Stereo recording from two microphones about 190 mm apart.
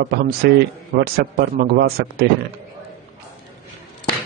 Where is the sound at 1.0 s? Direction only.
55° right (ahead or behind).